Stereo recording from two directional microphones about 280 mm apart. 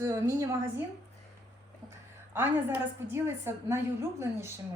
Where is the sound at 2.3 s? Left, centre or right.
Centre.